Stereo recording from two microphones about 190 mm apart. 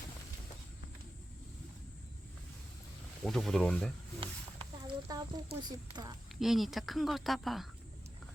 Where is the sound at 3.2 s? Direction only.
Centre (ahead or behind).